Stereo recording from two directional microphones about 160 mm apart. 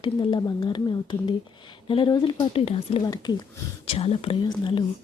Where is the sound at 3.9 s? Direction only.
40° left (ahead or behind).